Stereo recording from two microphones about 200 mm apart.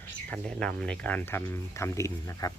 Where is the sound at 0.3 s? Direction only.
5° left (ahead or behind).